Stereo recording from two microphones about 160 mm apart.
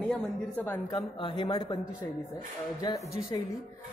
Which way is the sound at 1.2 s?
30° left (ahead or behind).